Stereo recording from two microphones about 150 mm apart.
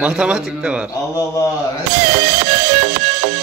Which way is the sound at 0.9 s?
25° left (ahead or behind).